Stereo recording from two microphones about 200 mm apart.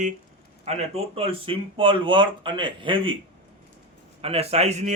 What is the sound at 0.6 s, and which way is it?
Speech, 30° right (ahead or behind).